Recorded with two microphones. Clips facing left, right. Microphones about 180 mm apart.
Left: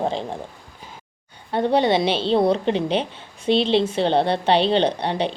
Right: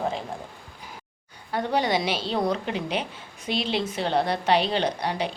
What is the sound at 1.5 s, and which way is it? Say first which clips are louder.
A woman's voice: left 6 dB; 30° left (ahead or behind).